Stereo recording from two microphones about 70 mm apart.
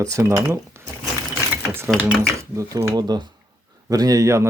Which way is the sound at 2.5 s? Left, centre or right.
Right.